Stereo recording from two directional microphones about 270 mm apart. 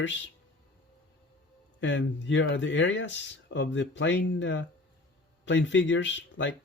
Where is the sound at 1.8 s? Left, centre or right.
Left.